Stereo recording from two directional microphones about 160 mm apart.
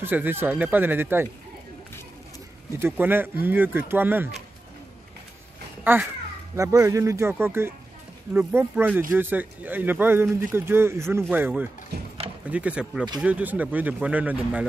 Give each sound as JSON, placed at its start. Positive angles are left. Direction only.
{"t": 0.0, "sound": "speech", "side_deg": -10}
{"t": 2.8, "sound": "speech", "side_deg": -15}
{"t": 5.9, "sound": "speech", "side_deg": -15}
{"t": 11.9, "sound": "speech", "side_deg": -90}
{"t": 12.4, "sound": "speech", "side_deg": -10}